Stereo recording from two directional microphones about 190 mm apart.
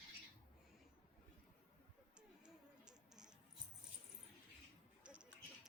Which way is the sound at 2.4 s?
5° right (ahead or behind).